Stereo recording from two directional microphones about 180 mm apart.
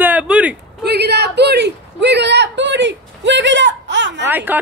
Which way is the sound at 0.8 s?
65° right (ahead or behind).